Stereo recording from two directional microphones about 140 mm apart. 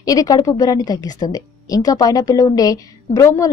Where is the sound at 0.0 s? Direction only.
25° left (ahead or behind).